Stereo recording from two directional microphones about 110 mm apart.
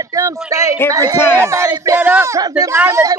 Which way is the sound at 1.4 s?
25° right (ahead or behind).